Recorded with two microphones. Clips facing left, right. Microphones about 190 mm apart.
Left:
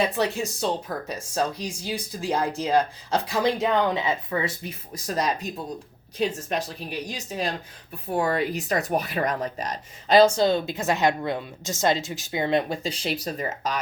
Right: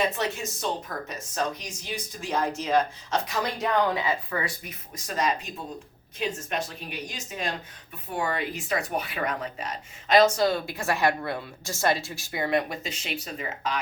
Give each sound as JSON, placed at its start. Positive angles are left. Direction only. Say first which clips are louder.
{"t": 0.2, "sound": "speech", "louder": "left 5 dB", "side_deg": 35}
{"t": 4.9, "sound": "speech", "louder": "left 1 dB", "side_deg": 35}
{"t": 8.1, "sound": "speech", "louder": "left 5 dB", "side_deg": 40}